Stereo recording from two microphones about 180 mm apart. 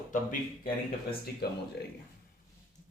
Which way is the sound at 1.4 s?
60° left (ahead or behind).